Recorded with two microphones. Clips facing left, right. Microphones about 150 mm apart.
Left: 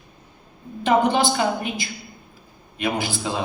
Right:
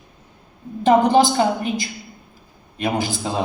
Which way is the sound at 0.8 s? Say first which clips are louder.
Right 4 dB; 40° right (ahead or behind).